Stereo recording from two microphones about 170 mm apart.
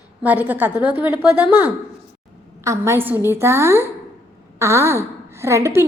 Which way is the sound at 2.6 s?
15° right (ahead or behind).